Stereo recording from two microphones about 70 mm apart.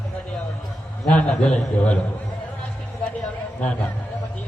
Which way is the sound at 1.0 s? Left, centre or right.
Centre.